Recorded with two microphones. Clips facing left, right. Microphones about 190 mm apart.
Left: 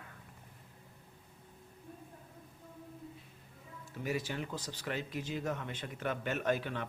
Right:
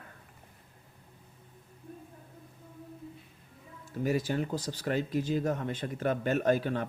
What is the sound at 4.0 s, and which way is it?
Speech, 40° right (ahead or behind).